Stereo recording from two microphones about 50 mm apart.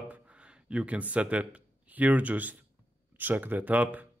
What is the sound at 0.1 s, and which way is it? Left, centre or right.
Speech, right.